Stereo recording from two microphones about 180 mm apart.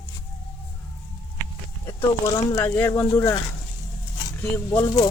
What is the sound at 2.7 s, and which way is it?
Speech, 10° left (ahead or behind).